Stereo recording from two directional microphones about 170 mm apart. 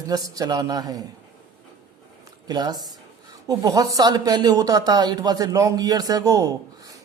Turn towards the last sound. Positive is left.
turn(degrees=-20)  # may be behind; listen again after turning